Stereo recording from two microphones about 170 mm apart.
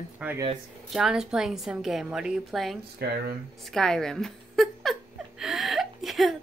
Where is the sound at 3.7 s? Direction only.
5° left (ahead or behind).